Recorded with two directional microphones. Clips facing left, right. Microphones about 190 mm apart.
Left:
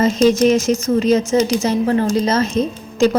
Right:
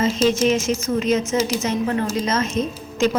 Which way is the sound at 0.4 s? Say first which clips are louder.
Left 5 dB; 40° left (ahead or behind).